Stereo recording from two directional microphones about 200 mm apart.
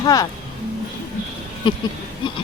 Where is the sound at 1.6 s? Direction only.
25° left (ahead or behind).